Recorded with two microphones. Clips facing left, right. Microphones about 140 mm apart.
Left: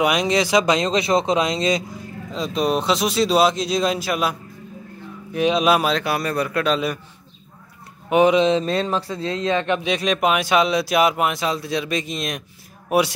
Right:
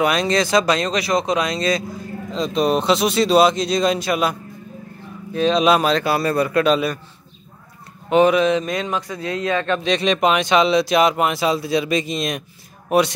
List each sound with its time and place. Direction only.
0.0 s speech: 15° left (ahead or behind)
2.3 s speech: centre (ahead or behind)
5.3 s speech: 15° left (ahead or behind); by 6.8 s centre (ahead or behind)
8.1 s speech: 15° left (ahead or behind)
9.8 s speech: 5° left (ahead or behind)